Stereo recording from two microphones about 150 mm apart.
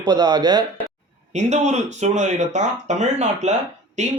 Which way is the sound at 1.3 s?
50° right (ahead or behind).